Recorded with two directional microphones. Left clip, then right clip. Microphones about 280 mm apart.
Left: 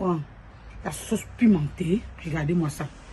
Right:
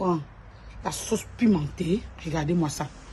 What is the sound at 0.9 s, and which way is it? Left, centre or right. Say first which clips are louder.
A woman's voice: right 2 dB; right.